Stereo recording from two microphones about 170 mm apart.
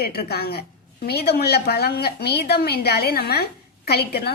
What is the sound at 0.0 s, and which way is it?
A woman's voice, 65° left (ahead or behind).